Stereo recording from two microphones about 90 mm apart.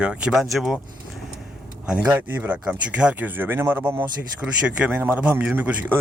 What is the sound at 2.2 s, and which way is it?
Speech, 20° right (ahead or behind).